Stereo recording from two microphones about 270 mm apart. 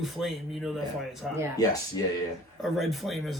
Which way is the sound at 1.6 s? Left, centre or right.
Centre.